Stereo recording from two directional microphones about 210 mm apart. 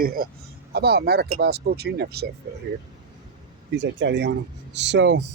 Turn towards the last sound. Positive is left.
turn(degrees=-55)  # may be behind; listen again after turning